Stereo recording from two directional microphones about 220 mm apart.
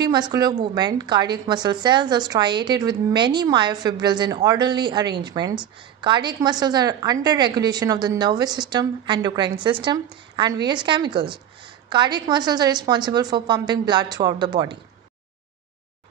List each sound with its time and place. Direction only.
0.0 s a woman's voice: 20° right (ahead or behind)